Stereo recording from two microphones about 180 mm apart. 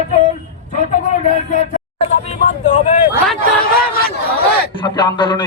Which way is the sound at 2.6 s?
45° left (ahead or behind).